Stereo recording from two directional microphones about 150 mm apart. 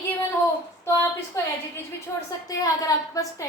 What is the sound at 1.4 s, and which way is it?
A woman's voice, 15° left (ahead or behind).